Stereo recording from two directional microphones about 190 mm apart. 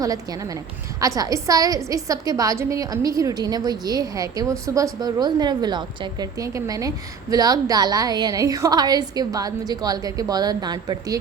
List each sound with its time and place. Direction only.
1.0 s a woman's voice: 15° right (ahead or behind)